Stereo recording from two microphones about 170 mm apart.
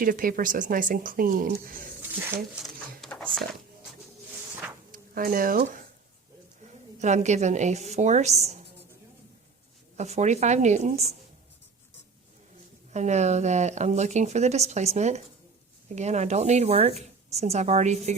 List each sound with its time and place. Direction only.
0.0 s a woman's voice: 55° right (ahead or behind)
2.0 s speech: 10° right (ahead or behind)
3.0 s a sound: 5° left (ahead or behind)
4.9 s speech: 55° right (ahead or behind)
7.0 s a woman's voice: 45° right (ahead or behind)
10.0 s a woman's voice: 40° right (ahead or behind)
12.9 s a woman's voice: 40° right (ahead or behind)